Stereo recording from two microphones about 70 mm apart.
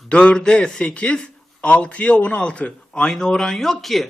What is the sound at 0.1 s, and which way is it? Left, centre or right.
Speech, centre.